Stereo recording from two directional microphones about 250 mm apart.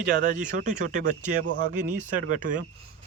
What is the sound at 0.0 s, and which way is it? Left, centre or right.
Speech, right.